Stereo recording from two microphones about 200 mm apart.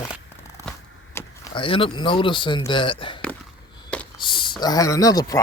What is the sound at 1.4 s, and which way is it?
Speech, 25° left (ahead or behind).